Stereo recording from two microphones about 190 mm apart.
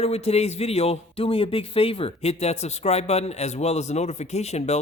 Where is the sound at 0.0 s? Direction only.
30° left (ahead or behind).